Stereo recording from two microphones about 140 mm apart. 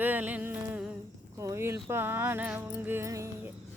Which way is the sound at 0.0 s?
10° right (ahead or behind).